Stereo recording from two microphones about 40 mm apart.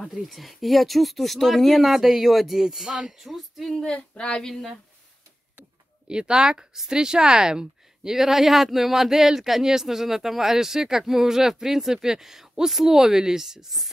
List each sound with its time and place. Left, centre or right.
0.1 s speech: centre
3.9 s female singing: left
4.5 s speech: centre
6.0 s speech: right